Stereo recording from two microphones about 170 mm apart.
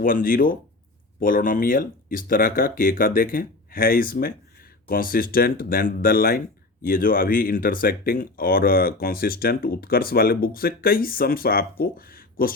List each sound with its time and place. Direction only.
0.0 s speech: 55° left (ahead or behind)